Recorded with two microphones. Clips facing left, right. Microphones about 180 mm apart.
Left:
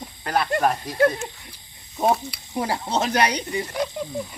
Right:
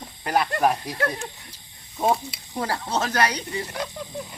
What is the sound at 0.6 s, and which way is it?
Speech, 10° right (ahead or behind).